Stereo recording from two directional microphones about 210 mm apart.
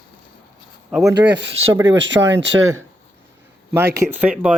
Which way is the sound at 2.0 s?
60° right (ahead or behind).